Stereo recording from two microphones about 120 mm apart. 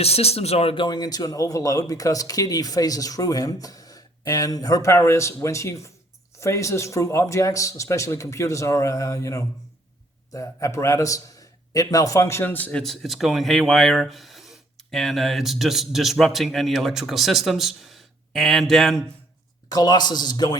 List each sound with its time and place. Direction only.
0.0 s a man's voice: 60° left (ahead or behind); by 12.8 s 15° left (ahead or behind)
12.8 s speech: centre (ahead or behind)
19.6 s speech: 30° left (ahead or behind)